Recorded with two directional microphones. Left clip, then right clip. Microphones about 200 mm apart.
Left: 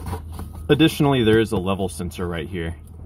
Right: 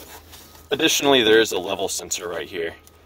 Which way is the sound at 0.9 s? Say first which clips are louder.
Right 3 dB; 15° right (ahead or behind).